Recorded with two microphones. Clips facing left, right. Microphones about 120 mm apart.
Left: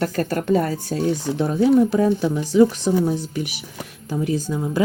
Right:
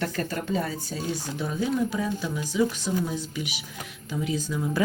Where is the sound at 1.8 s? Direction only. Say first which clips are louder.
Left 10 dB; 60° left (ahead or behind).